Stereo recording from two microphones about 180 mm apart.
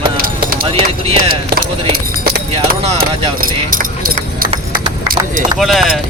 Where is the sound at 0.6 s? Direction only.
30° right (ahead or behind).